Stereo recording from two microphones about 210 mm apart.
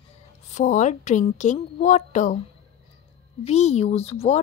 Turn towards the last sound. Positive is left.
turn(degrees=30)  # may be behind; listen again after turning